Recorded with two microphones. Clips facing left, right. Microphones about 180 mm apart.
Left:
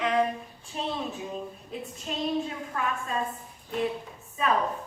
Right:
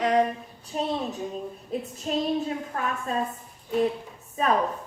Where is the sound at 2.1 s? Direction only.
40° right (ahead or behind).